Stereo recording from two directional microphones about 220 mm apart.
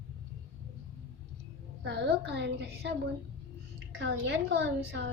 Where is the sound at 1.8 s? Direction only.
50° right (ahead or behind).